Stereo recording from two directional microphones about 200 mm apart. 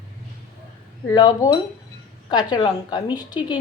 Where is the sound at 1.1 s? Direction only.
20° left (ahead or behind).